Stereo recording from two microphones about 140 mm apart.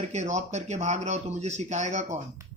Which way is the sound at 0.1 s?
55° right (ahead or behind).